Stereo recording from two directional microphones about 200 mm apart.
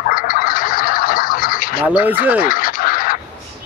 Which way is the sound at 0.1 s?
45° left (ahead or behind).